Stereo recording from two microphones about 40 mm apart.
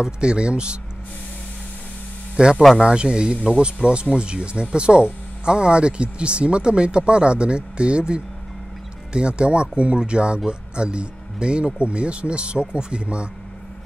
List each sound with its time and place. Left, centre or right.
0.0 s speech: right
2.4 s speech: right